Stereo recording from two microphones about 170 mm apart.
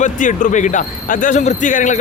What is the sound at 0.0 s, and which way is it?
A man's voice, 50° left (ahead or behind).